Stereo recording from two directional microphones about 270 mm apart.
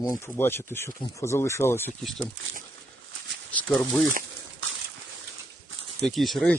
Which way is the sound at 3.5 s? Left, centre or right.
Centre.